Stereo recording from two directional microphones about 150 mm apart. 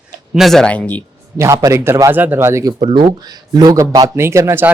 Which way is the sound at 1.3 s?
20° right (ahead or behind).